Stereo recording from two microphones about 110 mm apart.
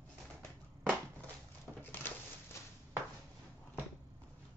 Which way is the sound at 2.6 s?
25° left (ahead or behind).